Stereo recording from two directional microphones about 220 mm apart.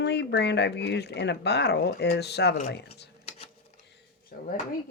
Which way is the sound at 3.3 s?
25° left (ahead or behind).